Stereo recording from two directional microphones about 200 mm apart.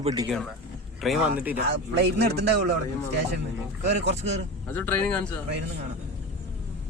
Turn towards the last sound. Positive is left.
turn(degrees=5)  # may be behind; listen again after turning